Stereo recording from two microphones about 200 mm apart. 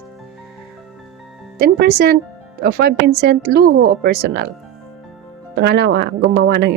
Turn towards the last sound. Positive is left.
turn(degrees=-55)  # may be behind; listen again after turning